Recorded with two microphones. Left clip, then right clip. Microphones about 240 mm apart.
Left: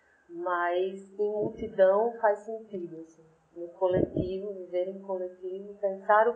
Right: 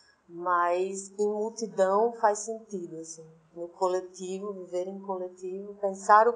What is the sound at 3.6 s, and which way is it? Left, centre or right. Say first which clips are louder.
A woman's voice: left 2 dB; right.